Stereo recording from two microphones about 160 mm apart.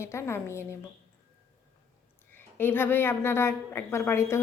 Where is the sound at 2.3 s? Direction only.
15° left (ahead or behind).